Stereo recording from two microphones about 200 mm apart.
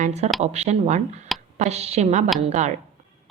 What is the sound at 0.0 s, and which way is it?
A woman's voice, 35° right (ahead or behind).